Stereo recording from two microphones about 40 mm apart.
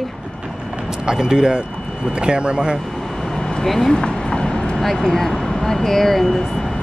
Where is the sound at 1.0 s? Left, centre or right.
Centre.